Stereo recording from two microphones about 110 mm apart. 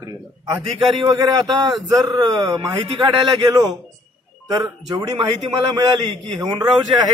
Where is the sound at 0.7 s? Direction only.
50° right (ahead or behind).